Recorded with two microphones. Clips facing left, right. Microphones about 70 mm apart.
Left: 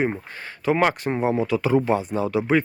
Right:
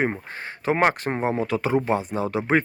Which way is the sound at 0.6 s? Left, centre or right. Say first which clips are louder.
Left 1 dB; right.